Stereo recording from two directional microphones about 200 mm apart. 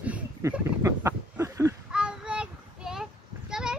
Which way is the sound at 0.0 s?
10° right (ahead or behind).